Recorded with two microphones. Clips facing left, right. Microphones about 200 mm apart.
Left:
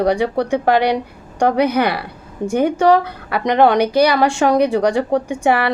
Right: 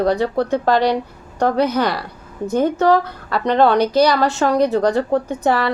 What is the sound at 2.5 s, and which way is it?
Speech, 10° left (ahead or behind).